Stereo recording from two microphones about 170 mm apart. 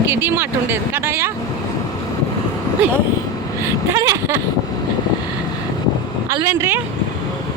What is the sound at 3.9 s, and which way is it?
Vehicle, 15° right (ahead or behind).